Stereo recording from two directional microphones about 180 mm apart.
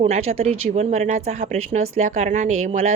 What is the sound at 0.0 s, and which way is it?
A woman's voice, 35° right (ahead or behind).